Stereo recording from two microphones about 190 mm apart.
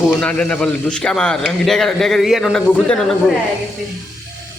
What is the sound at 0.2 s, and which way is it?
A man's voice, 5° left (ahead or behind).